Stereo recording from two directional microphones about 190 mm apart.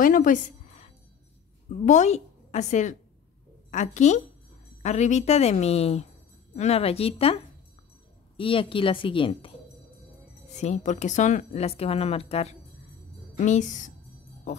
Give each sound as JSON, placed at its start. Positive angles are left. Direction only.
{"t": 0.0, "sound": "a sound", "side_deg": 45}
{"t": 1.9, "sound": "a woman's voice", "side_deg": 35}
{"t": 8.4, "sound": "speech", "side_deg": 30}
{"t": 10.5, "sound": "speech", "side_deg": 35}